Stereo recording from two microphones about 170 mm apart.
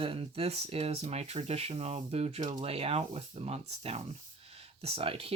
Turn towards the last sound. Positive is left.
turn(degrees=-35)  # may be behind; listen again after turning